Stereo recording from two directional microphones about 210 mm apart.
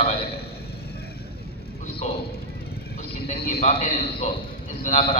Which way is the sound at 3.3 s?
35° left (ahead or behind).